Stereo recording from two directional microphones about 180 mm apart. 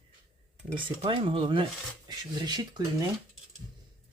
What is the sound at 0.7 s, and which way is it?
Cutlery, 30° right (ahead or behind).